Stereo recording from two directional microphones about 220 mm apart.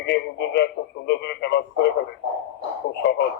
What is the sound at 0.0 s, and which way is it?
Radio, 50° left (ahead or behind).